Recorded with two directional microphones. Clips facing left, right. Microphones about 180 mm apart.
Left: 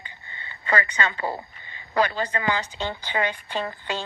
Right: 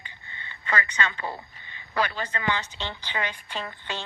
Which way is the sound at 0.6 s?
30° left (ahead or behind).